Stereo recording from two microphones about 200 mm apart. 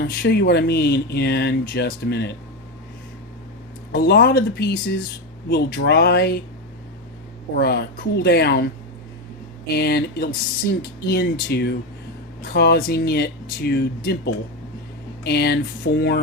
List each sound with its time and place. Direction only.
0.0 s speech: 55° left (ahead or behind)
3.9 s speech: 50° left (ahead or behind)
7.5 s speech: 55° left (ahead or behind)
9.7 s speech: 50° left (ahead or behind)
15.2 s speech: 55° left (ahead or behind)